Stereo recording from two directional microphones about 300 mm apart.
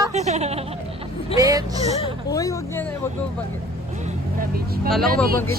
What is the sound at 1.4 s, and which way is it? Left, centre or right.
Vehicle, centre.